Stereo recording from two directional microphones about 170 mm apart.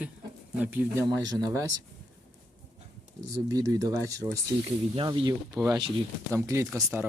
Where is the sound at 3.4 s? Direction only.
20° right (ahead or behind).